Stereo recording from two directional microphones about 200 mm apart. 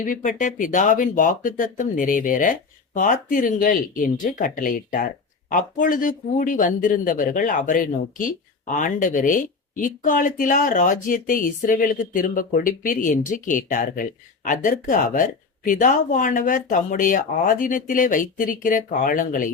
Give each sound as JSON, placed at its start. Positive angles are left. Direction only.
{"t": 0.0, "sound": "speech", "side_deg": 40}